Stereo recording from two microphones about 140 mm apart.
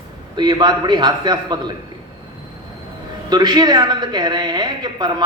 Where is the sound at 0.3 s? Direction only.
30° right (ahead or behind).